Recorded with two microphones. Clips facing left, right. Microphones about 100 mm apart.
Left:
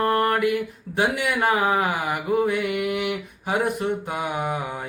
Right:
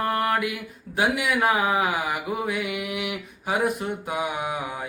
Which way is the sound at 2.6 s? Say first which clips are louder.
Left 5 dB; 55° left (ahead or behind).